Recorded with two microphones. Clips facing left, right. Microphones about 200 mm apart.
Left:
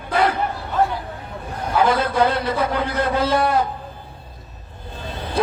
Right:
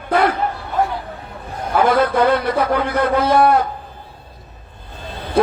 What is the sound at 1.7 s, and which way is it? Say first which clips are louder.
A man's voice: right 3 dB; 55° right (ahead or behind).